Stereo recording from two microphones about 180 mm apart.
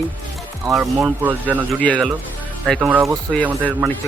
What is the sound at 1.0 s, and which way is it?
Speech, 10° right (ahead or behind).